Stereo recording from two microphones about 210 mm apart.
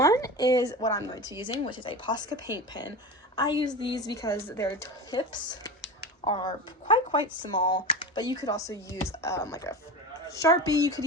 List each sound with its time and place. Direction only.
0.0 s a woman's voice: 15° left (ahead or behind)